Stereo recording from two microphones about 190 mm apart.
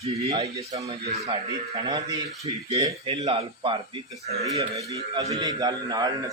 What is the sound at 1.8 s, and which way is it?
A man's voice, 20° right (ahead or behind).